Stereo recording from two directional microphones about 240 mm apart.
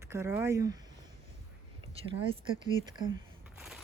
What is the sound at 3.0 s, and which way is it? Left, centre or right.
Speech, centre.